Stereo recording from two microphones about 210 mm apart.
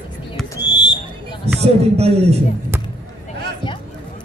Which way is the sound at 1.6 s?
30° right (ahead or behind).